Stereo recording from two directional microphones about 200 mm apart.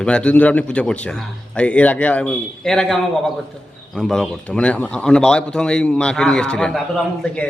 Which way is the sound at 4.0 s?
Centre (ahead or behind).